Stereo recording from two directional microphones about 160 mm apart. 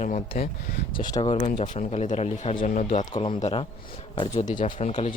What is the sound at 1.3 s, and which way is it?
Speech, 45° left (ahead or behind).